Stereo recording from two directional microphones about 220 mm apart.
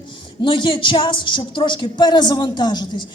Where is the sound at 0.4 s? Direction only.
20° left (ahead or behind).